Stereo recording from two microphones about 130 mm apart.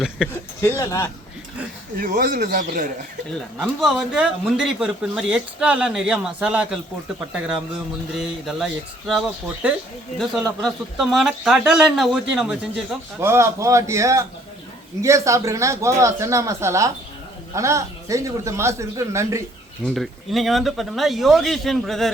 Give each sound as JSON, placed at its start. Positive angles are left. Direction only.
{"t": 0.2, "sound": "speech", "side_deg": -5}
{"t": 0.8, "sound": "speech", "side_deg": 20}
{"t": 2.0, "sound": "speech", "side_deg": -90}
{"t": 3.2, "sound": "a man's voice", "side_deg": 0}
{"t": 8.1, "sound": "a man's voice", "side_deg": 0}
{"t": 13.2, "sound": "speech", "side_deg": -20}
{"t": 19.8, "sound": "a man's voice", "side_deg": 0}